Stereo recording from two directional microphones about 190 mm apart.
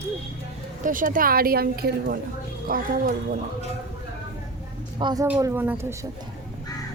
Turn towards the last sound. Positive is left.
turn(degrees=-10)  # may be behind; listen again after turning